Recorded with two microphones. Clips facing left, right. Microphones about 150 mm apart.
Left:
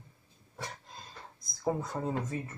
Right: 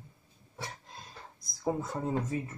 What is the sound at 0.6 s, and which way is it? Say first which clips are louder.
Dog: even; centre (ahead or behind).